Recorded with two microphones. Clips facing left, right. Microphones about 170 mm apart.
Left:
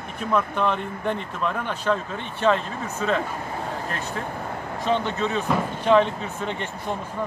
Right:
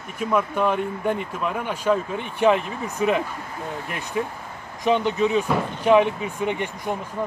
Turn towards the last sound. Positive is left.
turn(degrees=-15)  # may be behind; listen again after turning